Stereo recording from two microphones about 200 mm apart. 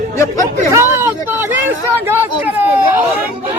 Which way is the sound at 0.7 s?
15° right (ahead or behind).